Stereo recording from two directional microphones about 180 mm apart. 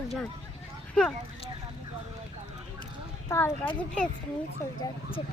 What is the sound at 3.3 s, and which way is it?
Speech, 15° left (ahead or behind).